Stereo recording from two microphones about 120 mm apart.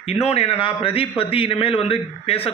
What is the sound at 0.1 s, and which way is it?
A man's voice, 60° left (ahead or behind).